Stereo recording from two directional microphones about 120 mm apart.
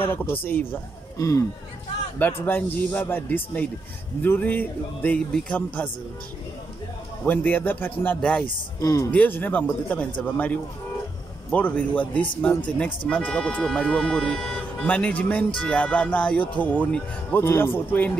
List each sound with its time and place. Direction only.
0.1 s speech: 15° left (ahead or behind)
1.1 s speech: 30° left (ahead or behind)
2.1 s speech: 15° left (ahead or behind)
7.2 s speech: 15° left (ahead or behind)